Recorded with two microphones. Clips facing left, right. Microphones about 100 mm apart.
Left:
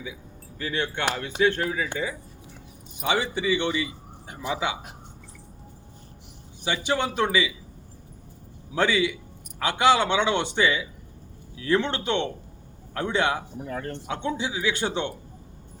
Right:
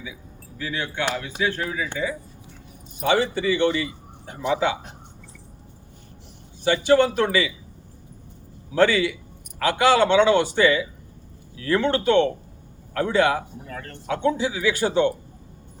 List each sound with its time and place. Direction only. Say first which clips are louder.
0.8 s a man's voice: even; 20° left (ahead or behind)
3.1 s a man's voice: right 4 dB; 15° left (ahead or behind)
6.7 s a man's voice: right 8 dB; 15° left (ahead or behind)
8.7 s a man's voice: right 4 dB; 15° left (ahead or behind)